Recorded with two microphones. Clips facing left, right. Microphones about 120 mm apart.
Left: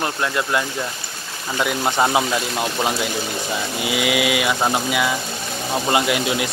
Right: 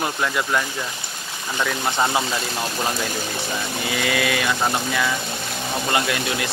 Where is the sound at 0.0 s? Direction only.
Centre (ahead or behind).